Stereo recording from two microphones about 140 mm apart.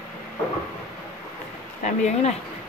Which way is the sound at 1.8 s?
55° left (ahead or behind).